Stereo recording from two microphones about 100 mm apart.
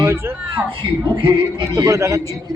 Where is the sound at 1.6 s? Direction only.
35° right (ahead or behind).